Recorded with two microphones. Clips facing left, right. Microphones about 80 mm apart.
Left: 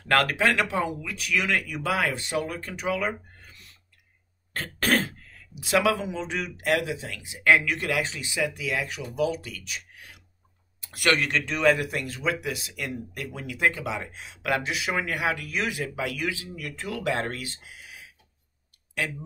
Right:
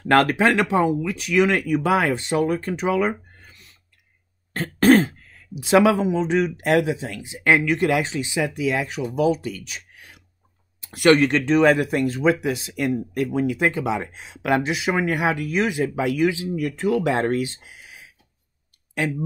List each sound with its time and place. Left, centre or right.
0.1 s speech: right
4.6 s speech: right
10.8 s speech: right